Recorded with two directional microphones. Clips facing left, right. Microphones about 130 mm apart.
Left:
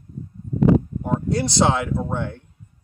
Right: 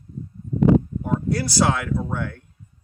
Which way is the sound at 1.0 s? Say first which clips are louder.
Left 1 dB; 25° left (ahead or behind).